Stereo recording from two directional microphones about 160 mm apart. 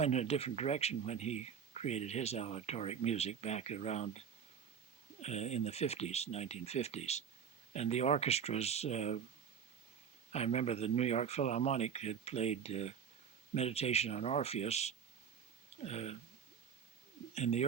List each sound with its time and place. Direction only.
0.0 s speech: 45° left (ahead or behind)
5.2 s speech: 45° left (ahead or behind)
10.3 s speech: 40° left (ahead or behind)
17.3 s speech: 45° left (ahead or behind)